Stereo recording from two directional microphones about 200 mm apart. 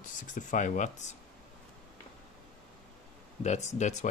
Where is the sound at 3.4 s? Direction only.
35° left (ahead or behind).